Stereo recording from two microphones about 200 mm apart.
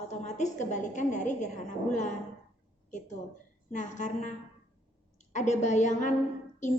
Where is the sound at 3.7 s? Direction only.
35° left (ahead or behind).